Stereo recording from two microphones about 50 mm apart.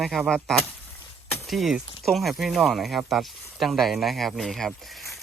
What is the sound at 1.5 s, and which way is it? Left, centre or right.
Speech, centre.